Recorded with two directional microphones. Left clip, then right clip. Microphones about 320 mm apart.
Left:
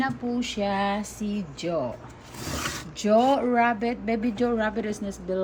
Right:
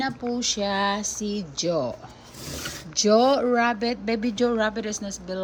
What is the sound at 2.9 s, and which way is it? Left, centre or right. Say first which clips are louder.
A woman's voice: right 2 dB; centre.